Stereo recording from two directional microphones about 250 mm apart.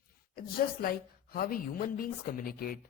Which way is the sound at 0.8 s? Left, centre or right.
Left.